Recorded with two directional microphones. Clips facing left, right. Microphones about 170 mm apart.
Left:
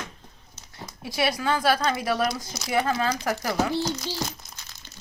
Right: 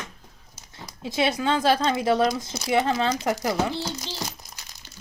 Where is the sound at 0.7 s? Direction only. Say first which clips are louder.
Right 3 dB; 20° right (ahead or behind).